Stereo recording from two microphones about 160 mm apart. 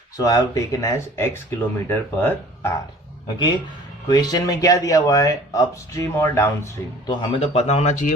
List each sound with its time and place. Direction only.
0.2 s speech: 20° left (ahead or behind)
4.1 s speech: 25° left (ahead or behind)
7.2 s speech: 35° left (ahead or behind)